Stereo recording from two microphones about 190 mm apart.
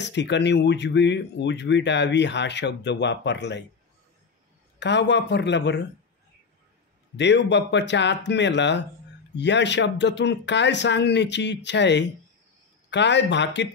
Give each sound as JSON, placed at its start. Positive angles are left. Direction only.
{"t": 0.0, "sound": "speech", "side_deg": 65}
{"t": 4.7, "sound": "speech", "side_deg": 65}
{"t": 7.2, "sound": "speech", "side_deg": 65}